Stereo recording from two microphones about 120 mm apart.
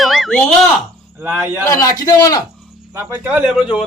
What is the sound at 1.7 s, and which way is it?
Speech, 30° left (ahead or behind).